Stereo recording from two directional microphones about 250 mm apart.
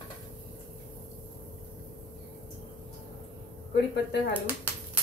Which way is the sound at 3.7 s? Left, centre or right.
Left.